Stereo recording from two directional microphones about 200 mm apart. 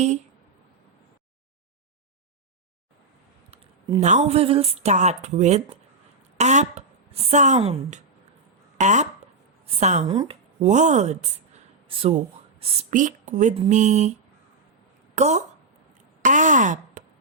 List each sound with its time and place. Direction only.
4.0 s a woman's voice: 35° right (ahead or behind)
10.1 s speech: 20° right (ahead or behind)
10.6 s speech: 35° right (ahead or behind)
12.5 s speech: 40° right (ahead or behind)
15.1 s speech: 35° right (ahead or behind)